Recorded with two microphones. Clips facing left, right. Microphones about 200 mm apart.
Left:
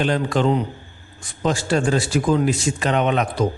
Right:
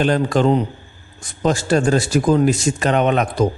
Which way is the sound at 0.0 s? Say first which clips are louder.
Right 3 dB; 45° right (ahead or behind).